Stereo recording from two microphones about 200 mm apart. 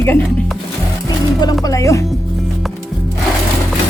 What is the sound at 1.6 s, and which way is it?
Speech, 15° left (ahead or behind).